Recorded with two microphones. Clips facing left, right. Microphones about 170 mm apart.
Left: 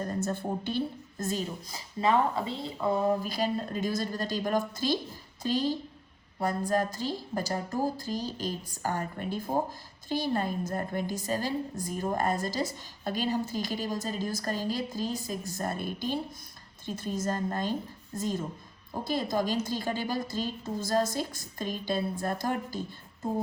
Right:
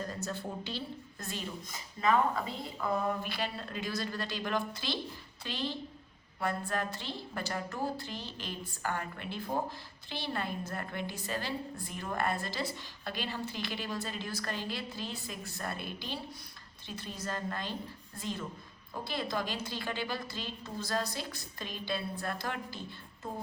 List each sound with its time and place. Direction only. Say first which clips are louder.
0.0 s a woman's voice: left 6 dB; 50° left (ahead or behind)